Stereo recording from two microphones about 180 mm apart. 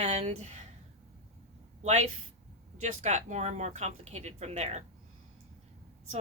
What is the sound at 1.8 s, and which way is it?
A woman's voice, 40° right (ahead or behind).